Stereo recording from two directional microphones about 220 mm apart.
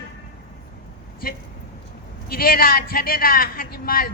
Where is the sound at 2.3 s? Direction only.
40° left (ahead or behind).